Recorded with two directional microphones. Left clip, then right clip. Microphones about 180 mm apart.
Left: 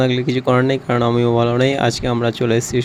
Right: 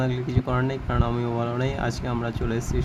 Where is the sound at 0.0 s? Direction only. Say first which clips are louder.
Left 11 dB; 45° left (ahead or behind).